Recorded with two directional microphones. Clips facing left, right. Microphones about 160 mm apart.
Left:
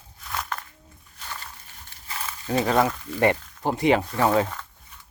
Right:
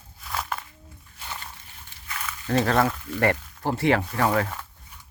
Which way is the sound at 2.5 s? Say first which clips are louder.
Even; 10° left (ahead or behind).